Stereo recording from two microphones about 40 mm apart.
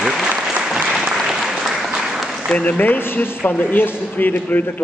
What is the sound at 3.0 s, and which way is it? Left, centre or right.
Speech, left.